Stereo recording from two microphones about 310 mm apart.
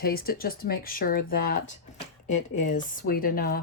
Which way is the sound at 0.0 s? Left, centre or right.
Left.